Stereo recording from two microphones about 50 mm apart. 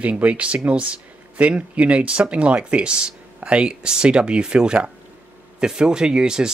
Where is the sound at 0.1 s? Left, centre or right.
Right.